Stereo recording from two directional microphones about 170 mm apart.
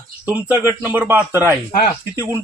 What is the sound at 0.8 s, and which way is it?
Speech, 10° right (ahead or behind).